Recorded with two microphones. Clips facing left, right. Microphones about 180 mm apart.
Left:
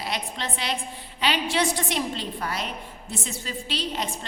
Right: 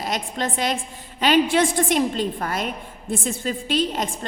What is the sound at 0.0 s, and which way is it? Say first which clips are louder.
A woman's voice: right 5 dB; 45° right (ahead or behind).